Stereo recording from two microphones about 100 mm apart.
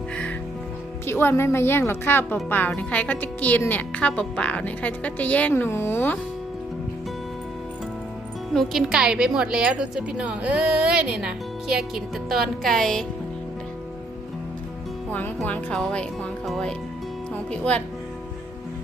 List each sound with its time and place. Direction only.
1.0 s a woman's voice: 25° left (ahead or behind)
8.5 s a woman's voice: 5° right (ahead or behind)
15.4 s a woman's voice: 15° left (ahead or behind)